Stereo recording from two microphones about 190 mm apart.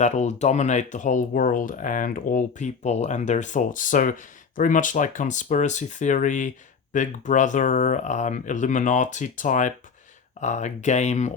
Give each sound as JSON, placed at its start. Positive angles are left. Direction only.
{"t": 0.0, "sound": "speech", "side_deg": 40}